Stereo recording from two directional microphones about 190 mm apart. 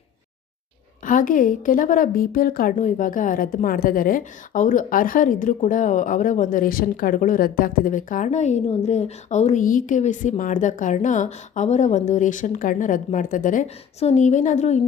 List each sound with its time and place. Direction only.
1.0 s a woman's voice: 45° left (ahead or behind)